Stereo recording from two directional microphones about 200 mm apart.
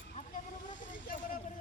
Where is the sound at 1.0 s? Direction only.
45° left (ahead or behind).